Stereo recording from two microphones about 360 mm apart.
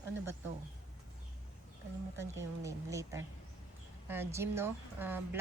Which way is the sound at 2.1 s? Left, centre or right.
Centre.